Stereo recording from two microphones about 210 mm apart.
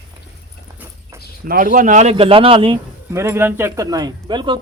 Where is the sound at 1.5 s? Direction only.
40° right (ahead or behind).